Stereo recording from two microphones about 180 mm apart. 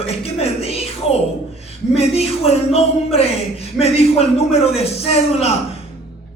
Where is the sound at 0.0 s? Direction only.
35° left (ahead or behind).